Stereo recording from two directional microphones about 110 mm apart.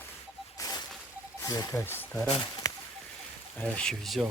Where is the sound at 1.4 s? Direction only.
35° left (ahead or behind).